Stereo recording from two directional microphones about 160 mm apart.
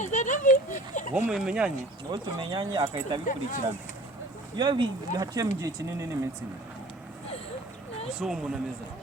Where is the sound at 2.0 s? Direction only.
25° right (ahead or behind).